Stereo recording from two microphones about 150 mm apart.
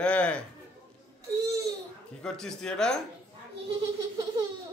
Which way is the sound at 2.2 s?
5° left (ahead or behind).